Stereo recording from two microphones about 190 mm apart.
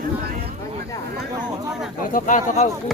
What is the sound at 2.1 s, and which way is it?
Speech, 45° left (ahead or behind).